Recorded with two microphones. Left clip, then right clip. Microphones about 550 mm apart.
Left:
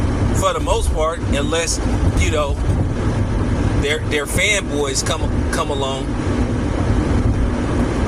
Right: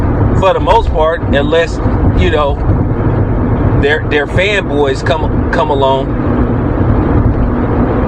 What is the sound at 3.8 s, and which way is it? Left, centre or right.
Speech, left.